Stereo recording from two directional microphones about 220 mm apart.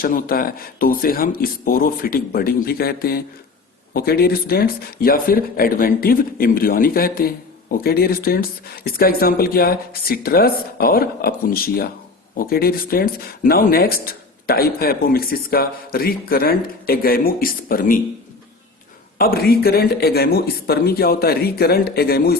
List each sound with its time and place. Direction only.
0.0 s speech: 40° left (ahead or behind)
19.2 s speech: 45° left (ahead or behind)